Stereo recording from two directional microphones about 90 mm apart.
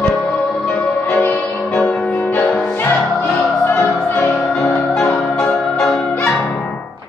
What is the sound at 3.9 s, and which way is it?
Music, 15° left (ahead or behind).